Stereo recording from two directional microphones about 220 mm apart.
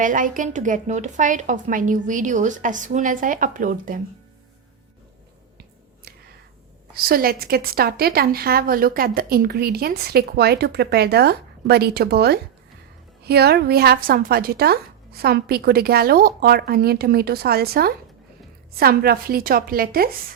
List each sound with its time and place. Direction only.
0.0 s a woman's voice: 35° right (ahead or behind)
5.5 s finger snapping: 45° right (ahead or behind)
6.9 s a woman's voice: 40° right (ahead or behind)